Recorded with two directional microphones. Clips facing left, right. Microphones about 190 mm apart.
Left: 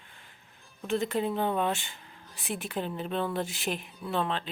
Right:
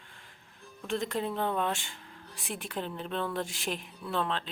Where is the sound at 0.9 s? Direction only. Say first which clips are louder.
Left 3 dB; 5° left (ahead or behind).